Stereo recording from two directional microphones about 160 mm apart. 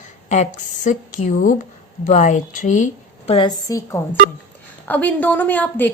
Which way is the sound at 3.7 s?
20° left (ahead or behind).